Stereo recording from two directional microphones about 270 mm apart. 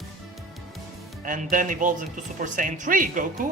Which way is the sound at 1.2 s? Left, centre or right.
Right.